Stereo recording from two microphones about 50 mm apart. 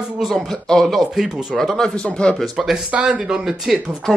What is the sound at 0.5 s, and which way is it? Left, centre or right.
Speech, centre.